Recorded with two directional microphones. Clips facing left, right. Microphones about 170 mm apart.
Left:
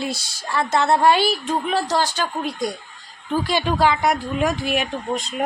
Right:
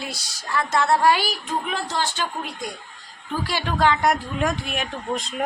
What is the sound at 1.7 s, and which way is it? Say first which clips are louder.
Speech: left 5 dB; 40° left (ahead or behind).